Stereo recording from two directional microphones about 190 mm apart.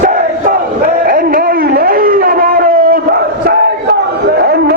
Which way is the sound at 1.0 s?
50° right (ahead or behind).